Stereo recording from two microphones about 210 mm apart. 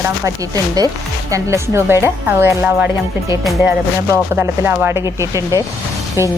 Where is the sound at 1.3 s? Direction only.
15° right (ahead or behind).